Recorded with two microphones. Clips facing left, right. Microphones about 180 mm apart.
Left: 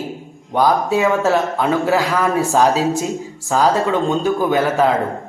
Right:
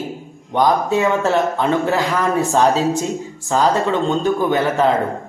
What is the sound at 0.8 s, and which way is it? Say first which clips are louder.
A man's voice: left 1 dB; 5° left (ahead or behind).